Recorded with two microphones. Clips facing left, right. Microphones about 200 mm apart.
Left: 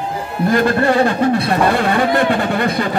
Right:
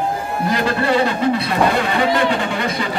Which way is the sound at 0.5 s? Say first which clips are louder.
Left 4 dB; 50° left (ahead or behind).